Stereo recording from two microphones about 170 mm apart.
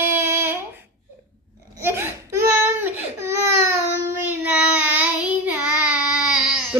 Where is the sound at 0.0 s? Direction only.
15° right (ahead or behind).